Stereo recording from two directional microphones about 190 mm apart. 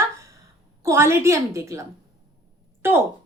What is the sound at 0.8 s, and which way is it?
A woman's voice, 15° right (ahead or behind).